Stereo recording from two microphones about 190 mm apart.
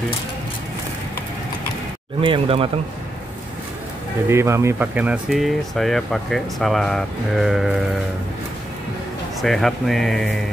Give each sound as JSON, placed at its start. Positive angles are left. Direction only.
{"t": 2.2, "sound": "speech", "side_deg": -30}
{"t": 4.3, "sound": "speech", "side_deg": -15}
{"t": 9.4, "sound": "speech", "side_deg": 0}